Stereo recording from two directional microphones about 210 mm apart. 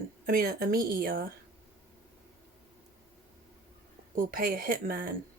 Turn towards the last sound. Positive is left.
turn(degrees=-45)  # may be behind; listen again after turning